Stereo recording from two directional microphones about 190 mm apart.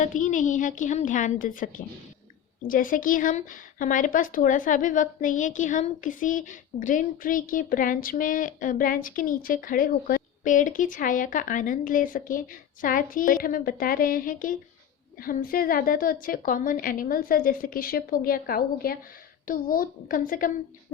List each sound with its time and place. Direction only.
0.0 s speech: 45° left (ahead or behind)